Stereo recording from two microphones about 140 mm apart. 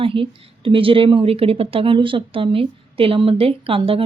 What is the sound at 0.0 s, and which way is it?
A woman's voice, 40° right (ahead or behind).